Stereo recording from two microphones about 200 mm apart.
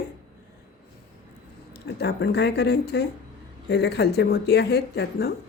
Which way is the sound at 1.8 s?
60° left (ahead or behind).